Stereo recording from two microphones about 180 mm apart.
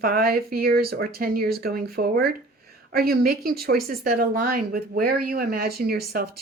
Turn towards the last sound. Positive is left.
turn(degrees=-60)  # may be behind; listen again after turning